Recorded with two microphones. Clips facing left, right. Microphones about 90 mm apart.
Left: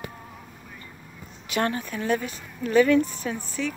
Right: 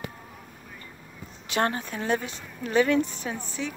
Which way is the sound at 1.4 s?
30° right (ahead or behind).